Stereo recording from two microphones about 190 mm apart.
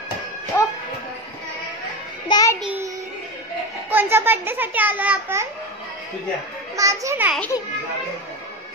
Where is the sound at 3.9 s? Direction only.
10° right (ahead or behind).